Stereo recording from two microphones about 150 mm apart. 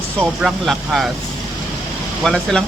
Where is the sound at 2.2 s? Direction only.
5° left (ahead or behind).